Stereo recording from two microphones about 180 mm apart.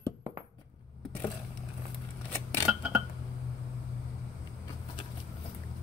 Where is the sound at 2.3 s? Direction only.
10° left (ahead or behind).